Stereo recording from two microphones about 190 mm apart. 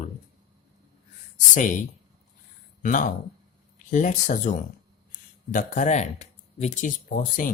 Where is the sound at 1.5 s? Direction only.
40° left (ahead or behind).